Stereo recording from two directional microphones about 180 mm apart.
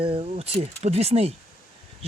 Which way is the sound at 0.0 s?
30° right (ahead or behind).